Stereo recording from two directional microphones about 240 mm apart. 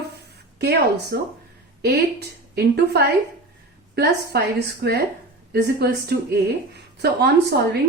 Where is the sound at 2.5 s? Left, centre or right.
Right.